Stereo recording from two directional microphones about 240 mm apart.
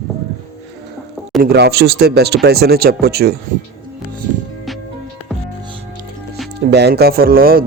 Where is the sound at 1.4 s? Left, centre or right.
Right.